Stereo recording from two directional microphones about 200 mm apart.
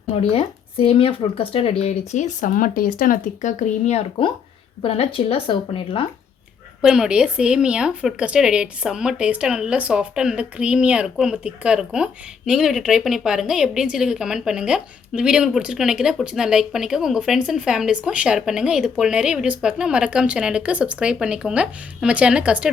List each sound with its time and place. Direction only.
0.1 s speech: 30° left (ahead or behind)
6.8 s speech: 5° right (ahead or behind)